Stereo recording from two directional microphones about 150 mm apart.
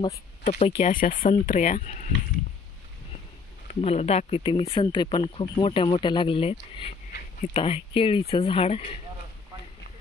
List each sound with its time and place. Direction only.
0.5 s speech: 45° left (ahead or behind)
0.9 s speech: 65° left (ahead or behind)
3.6 s speech: 45° left (ahead or behind)